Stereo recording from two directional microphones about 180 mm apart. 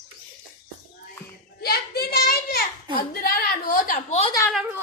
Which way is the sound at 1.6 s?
60° left (ahead or behind).